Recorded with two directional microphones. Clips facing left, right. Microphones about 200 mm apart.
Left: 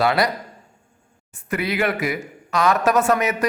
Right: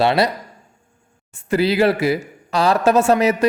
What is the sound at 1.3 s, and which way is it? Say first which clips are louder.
Speech: right 7 dB; 30° right (ahead or behind).